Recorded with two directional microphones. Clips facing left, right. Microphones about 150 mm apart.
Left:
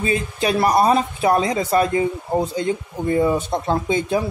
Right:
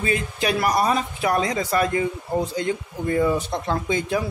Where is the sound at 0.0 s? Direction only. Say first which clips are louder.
Left 3 dB; 25° left (ahead or behind).